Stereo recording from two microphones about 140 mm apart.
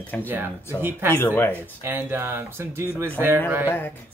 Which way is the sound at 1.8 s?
15° right (ahead or behind).